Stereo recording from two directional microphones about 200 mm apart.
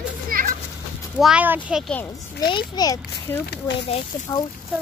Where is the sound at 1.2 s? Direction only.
5° right (ahead or behind).